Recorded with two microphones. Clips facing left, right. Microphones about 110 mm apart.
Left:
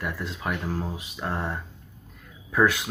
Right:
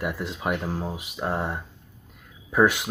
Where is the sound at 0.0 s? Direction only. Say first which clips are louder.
Right 3 dB; 15° right (ahead or behind).